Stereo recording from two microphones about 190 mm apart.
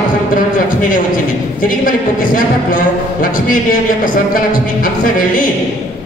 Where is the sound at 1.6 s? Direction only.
45° left (ahead or behind).